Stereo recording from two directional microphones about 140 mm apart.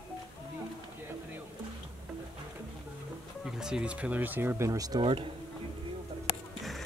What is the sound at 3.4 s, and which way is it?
Speech, 5° right (ahead or behind).